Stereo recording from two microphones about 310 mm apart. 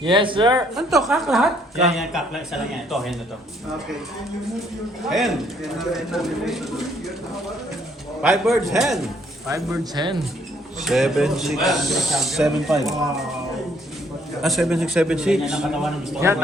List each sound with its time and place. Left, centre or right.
0.0 s speech: centre
0.8 s speech: centre
5.0 s speech: centre
8.2 s speech: centre
9.9 s speech: centre
10.8 s speech: centre
14.4 s speech: centre